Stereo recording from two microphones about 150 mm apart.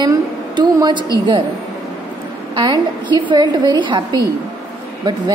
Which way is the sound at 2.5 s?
30° right (ahead or behind).